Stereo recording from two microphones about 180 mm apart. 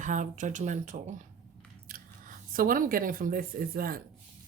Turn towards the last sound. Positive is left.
turn(degrees=-55)  # may be behind; listen again after turning